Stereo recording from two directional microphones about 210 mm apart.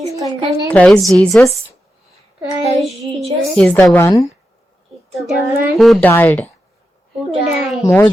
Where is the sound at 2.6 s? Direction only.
Centre (ahead or behind).